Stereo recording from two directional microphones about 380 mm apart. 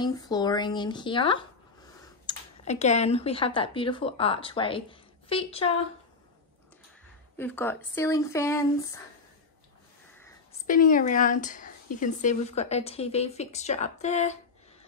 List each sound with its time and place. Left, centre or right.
0.0 s speech: centre
7.3 s speech: centre
10.7 s speech: left